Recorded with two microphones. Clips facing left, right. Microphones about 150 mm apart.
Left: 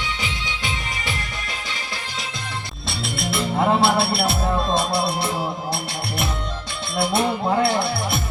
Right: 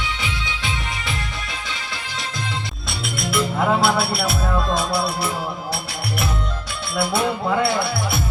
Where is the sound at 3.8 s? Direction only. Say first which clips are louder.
Left 1 dB; 25° left (ahead or behind).